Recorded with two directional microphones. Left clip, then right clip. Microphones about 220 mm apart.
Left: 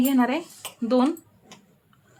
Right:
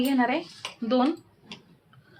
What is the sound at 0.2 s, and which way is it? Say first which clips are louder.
Speech: left 1 dB; 20° left (ahead or behind).